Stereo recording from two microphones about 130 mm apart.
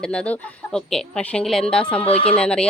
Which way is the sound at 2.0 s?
45° left (ahead or behind).